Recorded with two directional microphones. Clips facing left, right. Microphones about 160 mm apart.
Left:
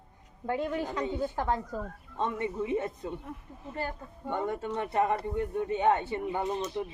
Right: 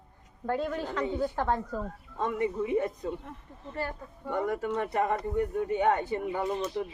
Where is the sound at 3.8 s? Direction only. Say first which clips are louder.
Right 1 dB; 25° left (ahead or behind).